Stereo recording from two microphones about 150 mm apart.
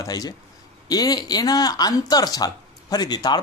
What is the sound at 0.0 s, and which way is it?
Speech, 25° left (ahead or behind).